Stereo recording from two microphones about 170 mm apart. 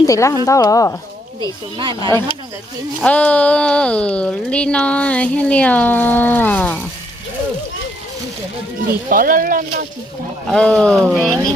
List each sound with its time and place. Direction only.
0.0 s speech: 20° left (ahead or behind)
1.4 s speech: 25° right (ahead or behind)
2.0 s speech: 20° left (ahead or behind)
3.0 s speech: 10° left (ahead or behind)
9.0 s speech: 55° right (ahead or behind)
10.5 s speech: 5° left (ahead or behind)